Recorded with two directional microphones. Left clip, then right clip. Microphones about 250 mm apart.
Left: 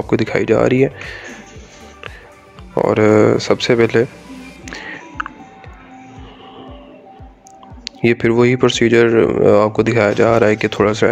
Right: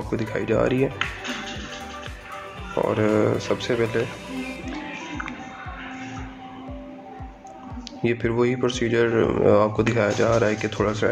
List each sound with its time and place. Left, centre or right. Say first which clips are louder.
0.1 s speech: left 9 dB; left
2.7 s speech: left 9 dB; left
7.8 s speech: left 9 dB; left